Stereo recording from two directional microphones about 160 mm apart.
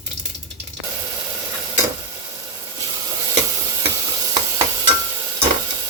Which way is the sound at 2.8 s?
20° right (ahead or behind).